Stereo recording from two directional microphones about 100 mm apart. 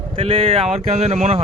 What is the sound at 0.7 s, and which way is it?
Speech, 90° right.